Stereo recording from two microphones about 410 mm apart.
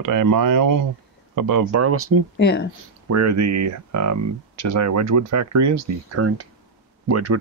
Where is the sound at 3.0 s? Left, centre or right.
Right.